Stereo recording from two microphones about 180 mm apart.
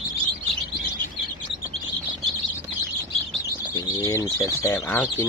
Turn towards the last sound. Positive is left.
turn(degrees=15)  # may be behind; listen again after turning